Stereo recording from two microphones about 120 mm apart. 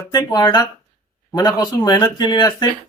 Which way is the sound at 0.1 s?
35° left (ahead or behind).